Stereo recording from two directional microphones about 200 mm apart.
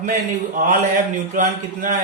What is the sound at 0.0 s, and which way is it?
A man's voice, 40° right (ahead or behind).